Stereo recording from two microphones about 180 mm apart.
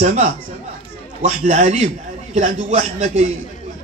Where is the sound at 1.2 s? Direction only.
40° right (ahead or behind).